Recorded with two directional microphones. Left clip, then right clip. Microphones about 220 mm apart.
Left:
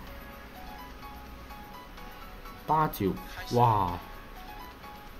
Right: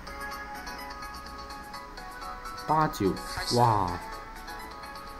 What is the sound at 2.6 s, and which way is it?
Speech, 5° right (ahead or behind).